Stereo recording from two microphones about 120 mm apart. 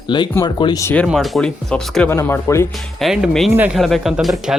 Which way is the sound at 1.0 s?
Centre (ahead or behind).